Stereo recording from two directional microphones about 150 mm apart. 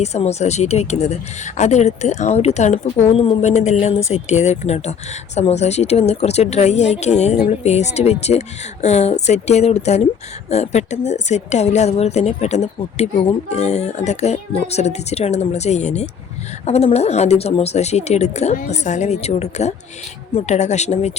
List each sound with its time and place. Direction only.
0.0 s speech: 45° left (ahead or behind)